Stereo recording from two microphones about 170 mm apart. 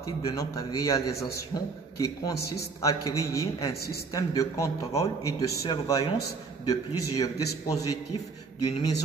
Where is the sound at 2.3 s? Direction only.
70° left (ahead or behind).